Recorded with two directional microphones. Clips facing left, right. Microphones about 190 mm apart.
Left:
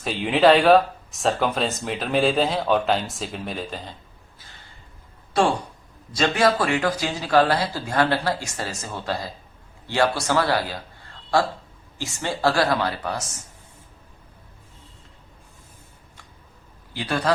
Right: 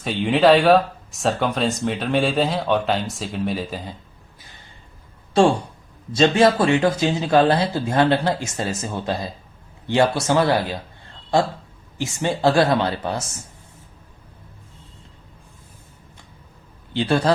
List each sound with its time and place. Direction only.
0.0 s speech: centre (ahead or behind)
5.3 s a man's voice: 30° right (ahead or behind)
16.9 s speech: 30° right (ahead or behind)